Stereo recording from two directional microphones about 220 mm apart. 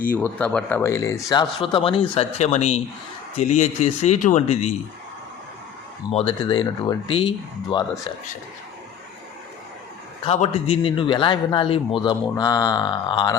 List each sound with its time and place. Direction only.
0.1 s speech: 5° left (ahead or behind); by 4.7 s 35° left (ahead or behind)
6.1 s speech: 30° left (ahead or behind)
10.2 s speech: 30° left (ahead or behind)